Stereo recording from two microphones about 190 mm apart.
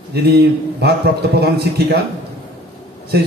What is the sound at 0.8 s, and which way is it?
A man's voice, 60° right (ahead or behind).